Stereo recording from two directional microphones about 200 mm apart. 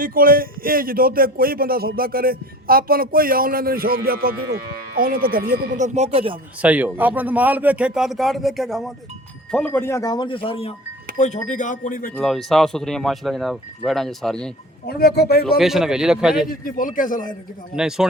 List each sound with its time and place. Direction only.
0.0 s speech: 45° right (ahead or behind); by 6.4 s 30° right (ahead or behind)
6.6 s speech: 5° right (ahead or behind); by 10.8 s 30° left (ahead or behind)
11.4 s speech: 40° left (ahead or behind)
12.1 s speech: centre (ahead or behind)
14.8 s a man's voice: 50° left (ahead or behind)
15.5 s speech: centre (ahead or behind)
16.5 s a man's voice: 45° left (ahead or behind)
17.7 s speech: 5° right (ahead or behind)